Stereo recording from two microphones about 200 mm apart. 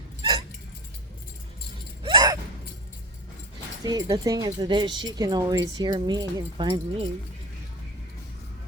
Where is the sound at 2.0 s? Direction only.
20° right (ahead or behind).